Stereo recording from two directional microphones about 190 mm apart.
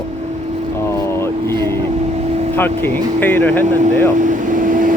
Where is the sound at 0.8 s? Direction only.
15° left (ahead or behind).